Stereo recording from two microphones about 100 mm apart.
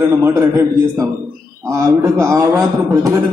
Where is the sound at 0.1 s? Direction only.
25° right (ahead or behind).